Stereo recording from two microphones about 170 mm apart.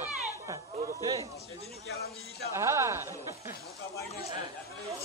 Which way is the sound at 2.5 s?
15° right (ahead or behind).